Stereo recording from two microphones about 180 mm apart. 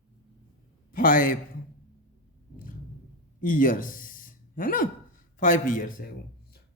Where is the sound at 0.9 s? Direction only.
50° left (ahead or behind).